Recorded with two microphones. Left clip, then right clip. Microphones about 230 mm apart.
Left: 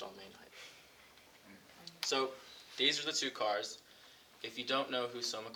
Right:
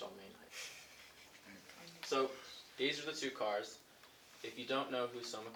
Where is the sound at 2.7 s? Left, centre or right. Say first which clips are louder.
Left 6 dB; left.